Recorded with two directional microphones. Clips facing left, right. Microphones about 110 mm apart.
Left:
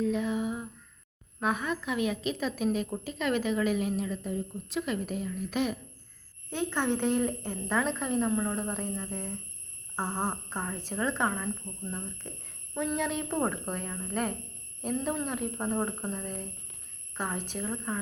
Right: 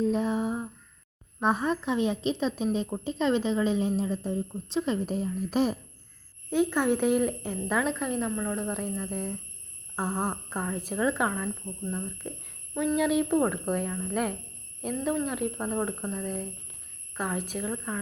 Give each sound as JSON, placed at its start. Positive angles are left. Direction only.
{"t": 0.0, "sound": "a sound", "side_deg": -35}
{"t": 1.4, "sound": "speech", "side_deg": -35}
{"t": 6.5, "sound": "a woman's voice", "side_deg": -10}
{"t": 12.7, "sound": "speech", "side_deg": 0}